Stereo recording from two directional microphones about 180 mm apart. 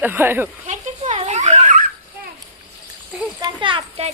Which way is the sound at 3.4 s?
25° right (ahead or behind).